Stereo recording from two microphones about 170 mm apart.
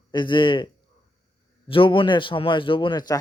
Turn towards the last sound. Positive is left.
turn(degrees=25)  # may be behind; listen again after turning